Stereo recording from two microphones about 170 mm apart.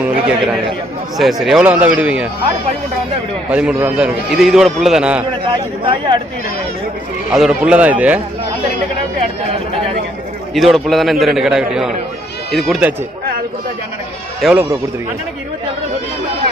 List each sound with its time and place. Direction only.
0.0 s a sound: 5° right (ahead or behind)
1.2 s a man's voice: centre (ahead or behind)
3.5 s a man's voice: 5° right (ahead or behind)
5.8 s speech: 30° right (ahead or behind)
7.3 s speech: centre (ahead or behind)
10.5 s a man's voice: centre (ahead or behind)
14.4 s speech: 10° right (ahead or behind)